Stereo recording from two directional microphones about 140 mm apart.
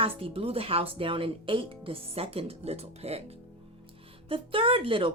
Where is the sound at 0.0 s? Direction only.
40° right (ahead or behind).